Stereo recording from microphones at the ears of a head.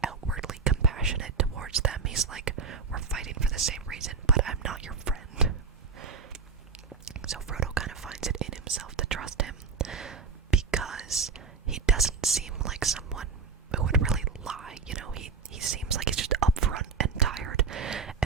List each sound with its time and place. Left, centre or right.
0.2 s whispering: right
7.0 s whispering: right
12.5 s whispering: right